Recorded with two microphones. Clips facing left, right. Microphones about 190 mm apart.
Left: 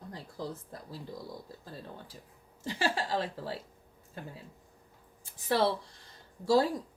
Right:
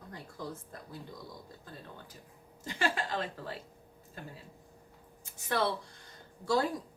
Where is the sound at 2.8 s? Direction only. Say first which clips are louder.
Left 2 dB; 30° left (ahead or behind).